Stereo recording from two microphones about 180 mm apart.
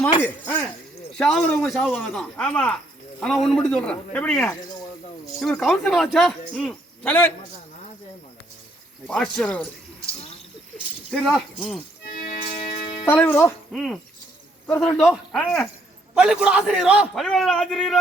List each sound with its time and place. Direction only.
0.2 s a man's voice: 10° left (ahead or behind)
9.0 s speech: 5° left (ahead or behind)
11.1 s speech: centre (ahead or behind)
12.2 s tick-tock: 40° left (ahead or behind)
13.1 s speech: 10° left (ahead or behind)
13.7 s speech: centre (ahead or behind)